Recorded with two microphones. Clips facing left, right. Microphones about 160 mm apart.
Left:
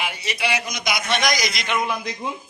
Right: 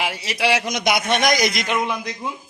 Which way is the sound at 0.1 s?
90° right.